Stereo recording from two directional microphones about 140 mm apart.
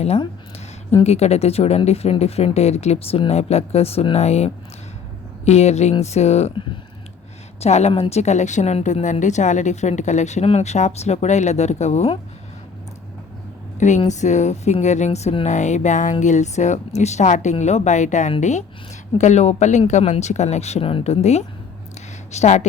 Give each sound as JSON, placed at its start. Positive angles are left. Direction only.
{"t": 1.0, "sound": "a woman's voice", "side_deg": 50}
{"t": 7.6, "sound": "a woman's voice", "side_deg": 50}
{"t": 13.7, "sound": "a woman's voice", "side_deg": 60}